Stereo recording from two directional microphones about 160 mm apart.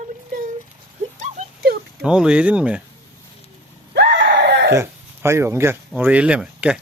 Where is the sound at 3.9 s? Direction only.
85° right.